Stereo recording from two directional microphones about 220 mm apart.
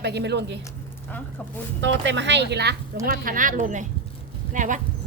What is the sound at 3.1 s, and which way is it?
Speech, 40° right (ahead or behind).